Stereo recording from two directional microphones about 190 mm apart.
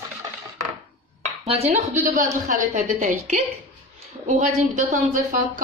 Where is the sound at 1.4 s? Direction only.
35° right (ahead or behind).